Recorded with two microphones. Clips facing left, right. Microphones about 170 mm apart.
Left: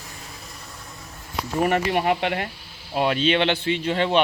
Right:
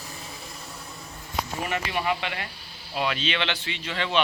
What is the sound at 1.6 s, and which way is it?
Speech, 50° left (ahead or behind).